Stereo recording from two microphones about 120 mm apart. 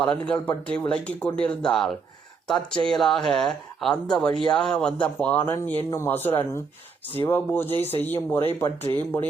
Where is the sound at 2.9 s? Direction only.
5° left (ahead or behind).